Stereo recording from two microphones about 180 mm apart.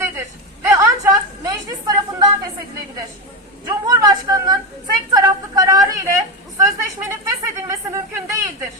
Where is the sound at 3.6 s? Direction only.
25° right (ahead or behind).